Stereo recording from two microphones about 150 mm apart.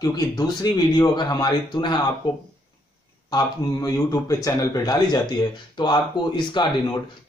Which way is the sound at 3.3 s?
25° left (ahead or behind).